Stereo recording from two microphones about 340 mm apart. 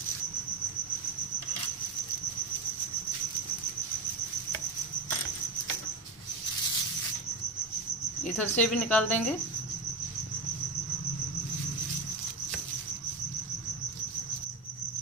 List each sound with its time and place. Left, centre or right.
8.4 s speech: centre